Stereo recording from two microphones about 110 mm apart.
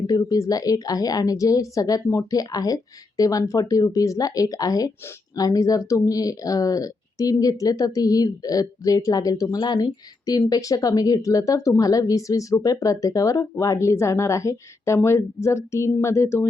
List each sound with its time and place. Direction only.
0.1 s a woman's voice: 35° left (ahead or behind)